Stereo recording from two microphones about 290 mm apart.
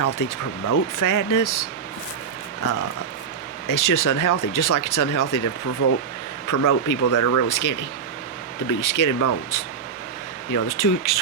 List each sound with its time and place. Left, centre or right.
0.0 s speech: left
3.7 s speech: left
6.5 s speech: left
7.1 s speech: left